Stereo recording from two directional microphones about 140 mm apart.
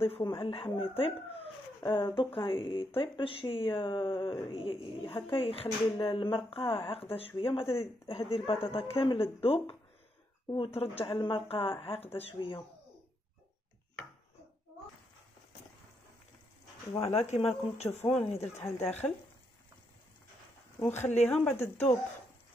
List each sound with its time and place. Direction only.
0.0 s speech: 40° left (ahead or behind)
17.0 s speech: 50° left (ahead or behind)
18.6 s speech: 15° left (ahead or behind)
20.8 s speech: 15° left (ahead or behind)